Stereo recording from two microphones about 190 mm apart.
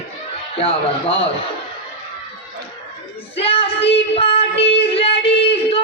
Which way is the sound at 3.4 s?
30° left (ahead or behind).